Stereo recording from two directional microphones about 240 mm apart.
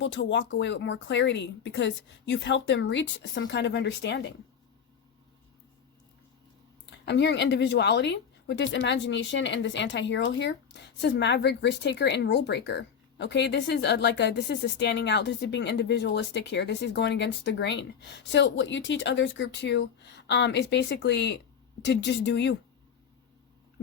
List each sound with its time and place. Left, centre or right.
0.0 s speech: left
7.0 s speech: left